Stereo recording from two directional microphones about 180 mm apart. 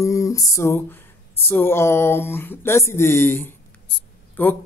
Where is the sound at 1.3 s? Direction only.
10° left (ahead or behind).